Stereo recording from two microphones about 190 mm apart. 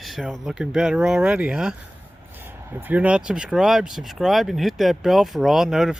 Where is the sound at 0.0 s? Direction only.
Centre (ahead or behind).